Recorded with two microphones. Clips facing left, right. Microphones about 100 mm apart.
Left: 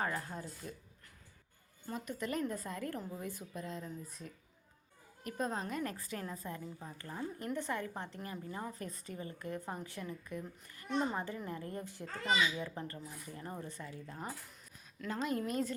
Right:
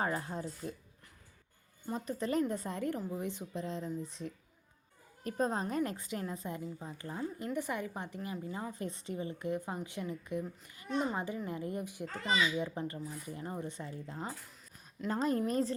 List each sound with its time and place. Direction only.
0.0 s speech: 25° right (ahead or behind)
1.9 s a woman's voice: 30° right (ahead or behind); by 8.7 s 10° right (ahead or behind)
8.8 s a woman's voice: 25° right (ahead or behind)
15.1 s a woman's voice: 35° right (ahead or behind)